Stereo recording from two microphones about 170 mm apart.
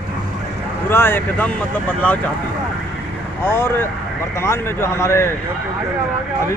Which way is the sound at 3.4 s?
15° left (ahead or behind).